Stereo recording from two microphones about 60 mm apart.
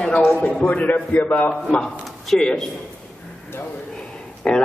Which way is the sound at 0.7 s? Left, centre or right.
Left.